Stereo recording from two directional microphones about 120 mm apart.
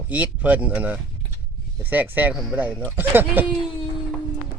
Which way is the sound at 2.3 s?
Centre (ahead or behind).